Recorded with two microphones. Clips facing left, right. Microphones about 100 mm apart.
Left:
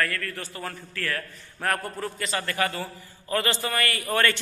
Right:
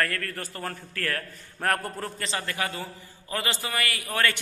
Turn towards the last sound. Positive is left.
turn(degrees=-5)  # may be behind; listen again after turning